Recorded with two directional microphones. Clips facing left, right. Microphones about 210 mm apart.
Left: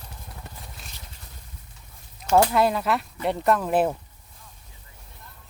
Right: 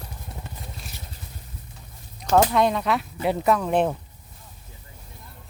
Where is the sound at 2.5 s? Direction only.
5° left (ahead or behind).